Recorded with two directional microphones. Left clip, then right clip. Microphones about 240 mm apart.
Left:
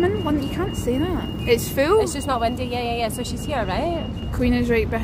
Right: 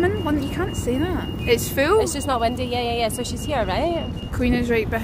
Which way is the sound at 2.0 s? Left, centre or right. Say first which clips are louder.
Even; centre.